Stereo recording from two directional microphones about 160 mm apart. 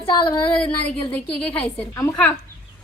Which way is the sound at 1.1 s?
10° left (ahead or behind).